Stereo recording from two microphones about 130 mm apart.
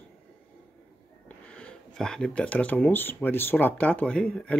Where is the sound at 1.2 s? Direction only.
10° left (ahead or behind).